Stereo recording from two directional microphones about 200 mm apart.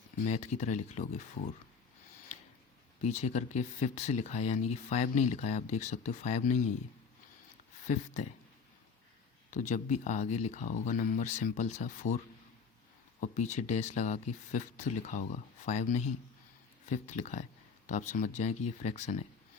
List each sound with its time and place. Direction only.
0.3 s speech: 35° left (ahead or behind)
3.0 s speech: 35° left (ahead or behind)
7.9 s speech: 35° left (ahead or behind)
9.5 s speech: 40° left (ahead or behind)